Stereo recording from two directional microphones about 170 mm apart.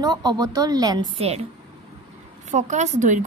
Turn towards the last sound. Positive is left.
turn(degrees=-45)  # may be behind; listen again after turning